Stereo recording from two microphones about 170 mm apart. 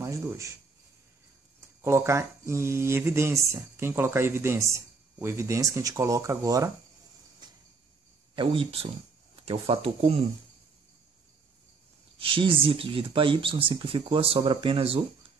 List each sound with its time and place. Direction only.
0.0 s speech: 15° right (ahead or behind)
1.8 s speech: 15° right (ahead or behind)
7.4 s cricket: 25° right (ahead or behind)
8.4 s speech: 30° right (ahead or behind)
12.2 s speech: 30° right (ahead or behind)